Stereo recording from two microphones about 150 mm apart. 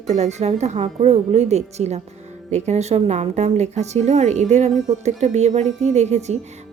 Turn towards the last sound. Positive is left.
turn(degrees=-50)  # may be behind; listen again after turning